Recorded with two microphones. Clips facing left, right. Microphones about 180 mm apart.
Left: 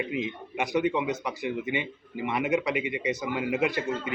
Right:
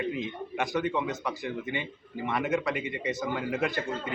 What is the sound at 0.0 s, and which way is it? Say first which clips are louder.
A man's voice: left 1 dB; 15° left (ahead or behind).